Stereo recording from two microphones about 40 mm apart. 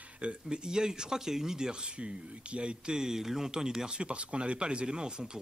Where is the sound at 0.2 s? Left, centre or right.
Right.